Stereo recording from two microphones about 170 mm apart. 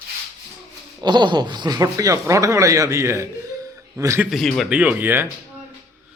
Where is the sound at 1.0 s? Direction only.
25° right (ahead or behind).